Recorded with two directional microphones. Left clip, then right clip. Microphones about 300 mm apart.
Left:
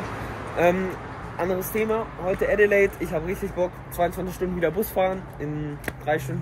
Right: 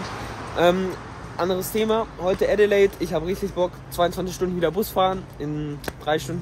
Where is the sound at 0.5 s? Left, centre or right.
Centre.